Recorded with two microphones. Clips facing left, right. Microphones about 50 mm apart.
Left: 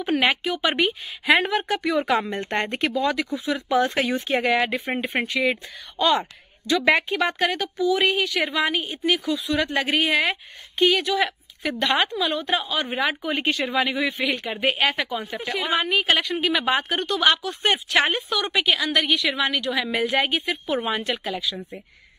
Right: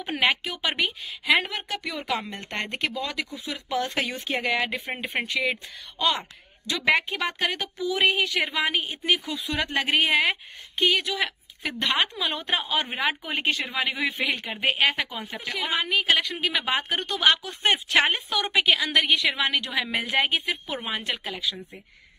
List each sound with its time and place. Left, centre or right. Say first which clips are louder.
0.2 s speech: left 3 dB; centre
1.2 s a woman's voice: left 4 dB; left; by 10.2 s centre
10.8 s speech: left 4 dB; centre
12.1 s a woman's voice: left 4 dB; centre
12.8 s a woman's voice: left 3 dB; centre
15.3 s a woman's voice: left 3 dB; centre
18.9 s a woman's voice: left 1 dB; right; by 21.5 s centre